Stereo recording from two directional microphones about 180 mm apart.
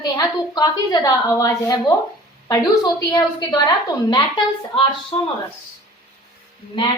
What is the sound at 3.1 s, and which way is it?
Speech, 20° left (ahead or behind).